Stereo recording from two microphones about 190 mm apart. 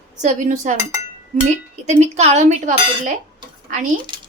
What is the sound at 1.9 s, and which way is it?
Speech, 35° right (ahead or behind).